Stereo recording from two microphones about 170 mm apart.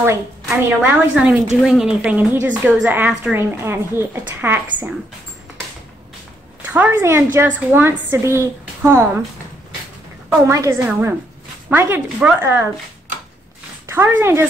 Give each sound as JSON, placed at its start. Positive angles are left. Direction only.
{"t": 0.0, "sound": "a woman's voice", "side_deg": -15}
{"t": 6.6, "sound": "a woman's voice", "side_deg": -10}
{"t": 10.4, "sound": "a woman's voice", "side_deg": -15}
{"t": 13.8, "sound": "speech", "side_deg": -10}